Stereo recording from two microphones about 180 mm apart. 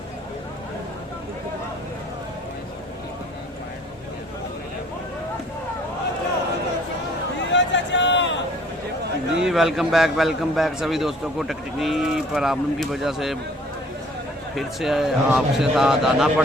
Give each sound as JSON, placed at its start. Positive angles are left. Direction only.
{"t": 7.5, "sound": "a sound", "side_deg": 85}
{"t": 9.3, "sound": "a man's voice", "side_deg": -5}
{"t": 14.5, "sound": "a man's voice", "side_deg": 0}